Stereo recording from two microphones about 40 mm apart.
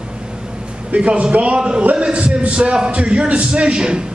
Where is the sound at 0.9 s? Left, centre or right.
Right.